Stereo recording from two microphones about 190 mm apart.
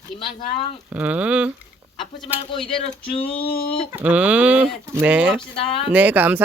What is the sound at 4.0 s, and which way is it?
Speech, 10° right (ahead or behind).